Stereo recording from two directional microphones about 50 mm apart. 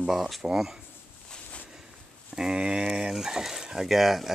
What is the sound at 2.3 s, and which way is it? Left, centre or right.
Speech, centre.